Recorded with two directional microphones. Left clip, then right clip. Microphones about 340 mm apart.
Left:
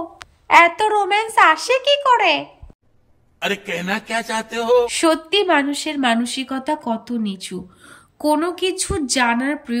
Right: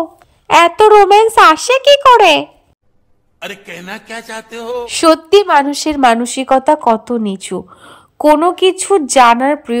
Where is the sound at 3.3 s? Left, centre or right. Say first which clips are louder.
Left 4 dB; centre.